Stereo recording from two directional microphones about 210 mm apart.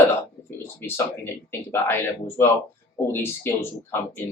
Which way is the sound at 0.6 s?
10° left (ahead or behind).